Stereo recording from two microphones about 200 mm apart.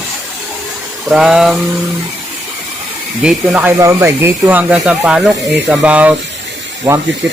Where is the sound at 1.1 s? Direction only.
5° right (ahead or behind).